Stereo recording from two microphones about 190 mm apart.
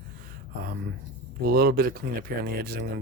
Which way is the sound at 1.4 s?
55° right (ahead or behind).